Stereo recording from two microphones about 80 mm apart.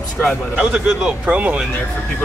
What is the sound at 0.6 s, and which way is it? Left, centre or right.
Speech, centre.